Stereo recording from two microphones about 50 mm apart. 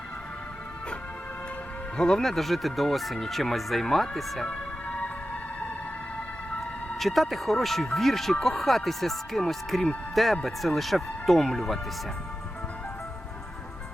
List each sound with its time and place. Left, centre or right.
2.0 s speech: centre
4.4 s music: left
7.0 s speech: centre